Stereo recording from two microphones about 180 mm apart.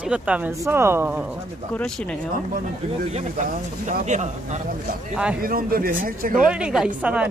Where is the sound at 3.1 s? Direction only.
45° right (ahead or behind).